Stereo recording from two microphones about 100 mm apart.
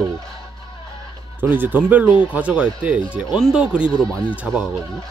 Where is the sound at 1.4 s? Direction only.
20° right (ahead or behind).